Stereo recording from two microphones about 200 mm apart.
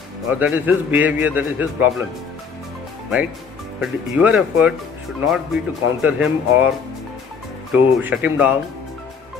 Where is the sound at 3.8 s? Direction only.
5° right (ahead or behind).